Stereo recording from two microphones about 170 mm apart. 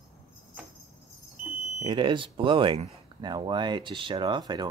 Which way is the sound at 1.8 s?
30° right (ahead or behind).